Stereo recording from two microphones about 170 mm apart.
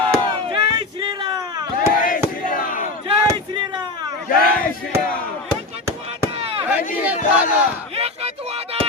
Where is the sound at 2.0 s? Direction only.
55° left (ahead or behind).